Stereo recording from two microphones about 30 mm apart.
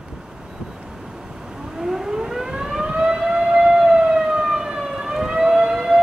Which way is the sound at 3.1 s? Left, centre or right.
Right.